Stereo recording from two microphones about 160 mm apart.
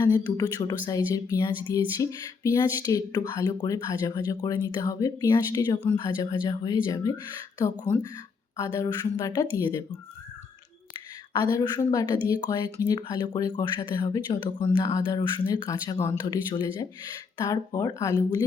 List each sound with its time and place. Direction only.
0.1 s speech: 25° left (ahead or behind)
8.5 s speech: 20° left (ahead or behind)
11.5 s speech: 25° left (ahead or behind)